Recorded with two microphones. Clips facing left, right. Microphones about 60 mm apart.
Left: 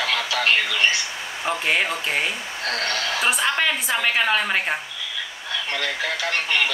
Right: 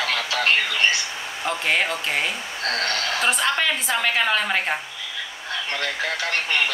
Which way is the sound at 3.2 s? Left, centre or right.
Centre.